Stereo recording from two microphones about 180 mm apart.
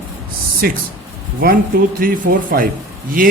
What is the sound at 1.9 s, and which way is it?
Speech, 50° right (ahead or behind).